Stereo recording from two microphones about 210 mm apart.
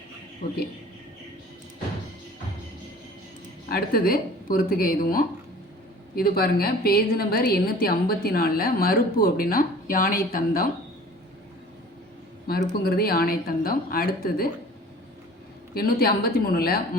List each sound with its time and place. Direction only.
3.7 s a woman's voice: 45° left (ahead or behind)
12.5 s a woman's voice: 45° left (ahead or behind)
15.7 s a woman's voice: 45° left (ahead or behind)